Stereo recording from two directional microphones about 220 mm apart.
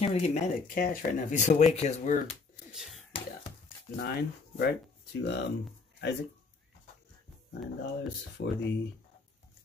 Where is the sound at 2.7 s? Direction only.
Centre (ahead or behind).